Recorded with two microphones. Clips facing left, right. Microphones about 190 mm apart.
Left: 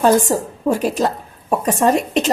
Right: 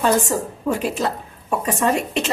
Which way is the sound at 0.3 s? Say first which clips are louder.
Left 4 dB; 35° left (ahead or behind).